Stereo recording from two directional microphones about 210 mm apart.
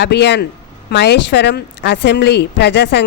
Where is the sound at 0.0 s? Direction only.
55° left (ahead or behind).